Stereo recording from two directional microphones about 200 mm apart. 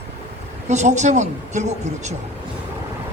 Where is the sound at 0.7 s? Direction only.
35° right (ahead or behind).